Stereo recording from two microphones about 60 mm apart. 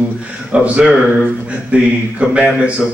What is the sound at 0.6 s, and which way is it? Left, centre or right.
Speech, right.